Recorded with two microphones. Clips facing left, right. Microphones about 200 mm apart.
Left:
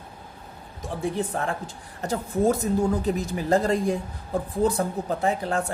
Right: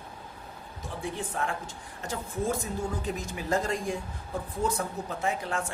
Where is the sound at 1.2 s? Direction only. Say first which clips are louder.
Left 5 dB; 35° left (ahead or behind).